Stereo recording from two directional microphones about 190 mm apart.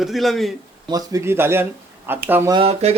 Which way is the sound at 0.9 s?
20° right (ahead or behind).